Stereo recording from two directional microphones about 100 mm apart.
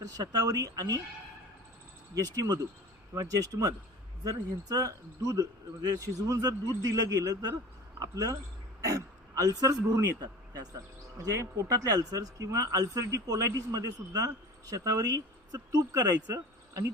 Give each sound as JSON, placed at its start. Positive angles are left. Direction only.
{"t": 0.0, "sound": "a man's voice", "side_deg": -40}
{"t": 2.1, "sound": "a man's voice", "side_deg": -35}